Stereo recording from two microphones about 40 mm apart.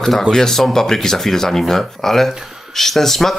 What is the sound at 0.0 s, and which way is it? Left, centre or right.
Speech, centre.